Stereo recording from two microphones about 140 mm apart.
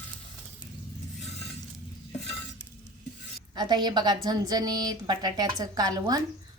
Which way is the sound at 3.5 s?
30° right (ahead or behind).